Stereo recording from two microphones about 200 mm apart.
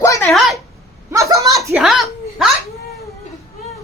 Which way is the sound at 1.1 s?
15° right (ahead or behind).